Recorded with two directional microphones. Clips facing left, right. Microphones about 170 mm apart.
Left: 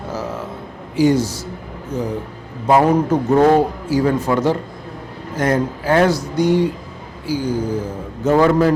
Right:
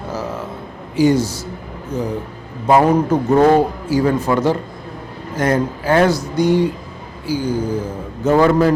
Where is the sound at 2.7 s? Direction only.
30° right (ahead or behind).